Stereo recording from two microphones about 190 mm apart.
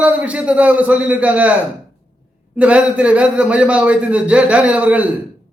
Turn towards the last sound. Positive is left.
turn(degrees=-5)  # may be behind; listen again after turning